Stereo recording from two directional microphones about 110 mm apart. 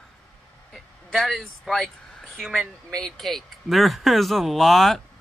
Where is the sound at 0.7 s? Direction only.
5° left (ahead or behind).